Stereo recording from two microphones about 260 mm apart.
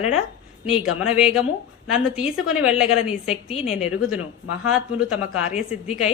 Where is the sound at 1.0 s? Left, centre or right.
Centre.